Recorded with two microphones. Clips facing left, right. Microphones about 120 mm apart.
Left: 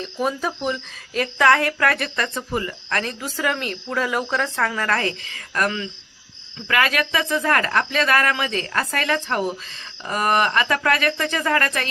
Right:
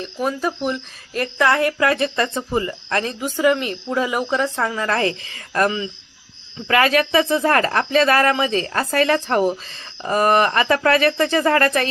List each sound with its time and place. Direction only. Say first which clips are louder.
0.0 s speech: right 1 dB; centre (ahead or behind)
1.8 s cricket: right 4 dB; 25° right (ahead or behind)
4.9 s speech: right 3 dB; 30° right (ahead or behind)